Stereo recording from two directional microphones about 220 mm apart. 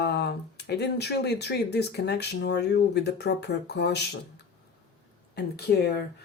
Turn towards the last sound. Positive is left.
turn(degrees=50)  # may be behind; listen again after turning